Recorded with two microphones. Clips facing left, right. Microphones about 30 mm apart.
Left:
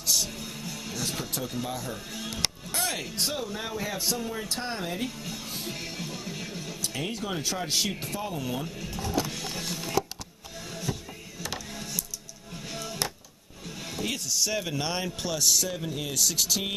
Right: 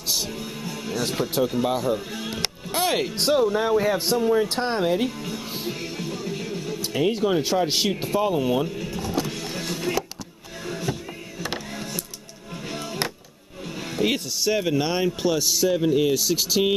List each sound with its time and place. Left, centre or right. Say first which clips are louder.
0.1 s speech: right 2 dB; centre
5.8 s music: right 6 dB; centre
6.9 s speech: right 12 dB; centre
7.6 s speech: right 6 dB; right
7.9 s music: right 11 dB; right
11.4 s a sound: right 5 dB; right
13.9 s a man's voice: right 6 dB; right